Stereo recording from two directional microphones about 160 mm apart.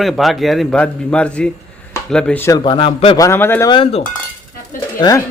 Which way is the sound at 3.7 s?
35° left (ahead or behind).